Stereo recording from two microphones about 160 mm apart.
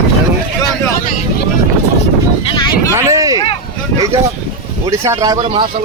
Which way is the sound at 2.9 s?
20° right (ahead or behind).